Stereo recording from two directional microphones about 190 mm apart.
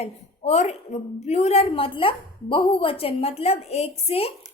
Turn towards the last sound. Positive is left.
turn(degrees=30)  # may be behind; listen again after turning